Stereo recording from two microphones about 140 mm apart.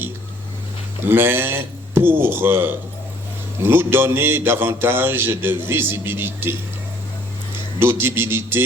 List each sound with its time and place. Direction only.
1.0 s speech: 15° right (ahead or behind)
7.8 s speech: 15° right (ahead or behind)